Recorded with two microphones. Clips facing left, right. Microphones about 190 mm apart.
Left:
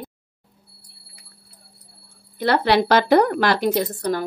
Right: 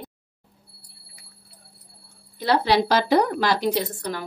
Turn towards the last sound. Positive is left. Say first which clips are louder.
# left 5 dB
turn(degrees=50)  # may be behind; listen again after turning